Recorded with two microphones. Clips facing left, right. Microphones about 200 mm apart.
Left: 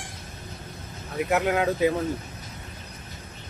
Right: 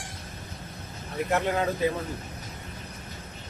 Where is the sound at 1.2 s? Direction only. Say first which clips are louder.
Left 3 dB; 5° left (ahead or behind).